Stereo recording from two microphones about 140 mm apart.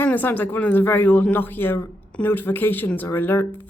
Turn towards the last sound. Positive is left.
turn(degrees=15)  # may be behind; listen again after turning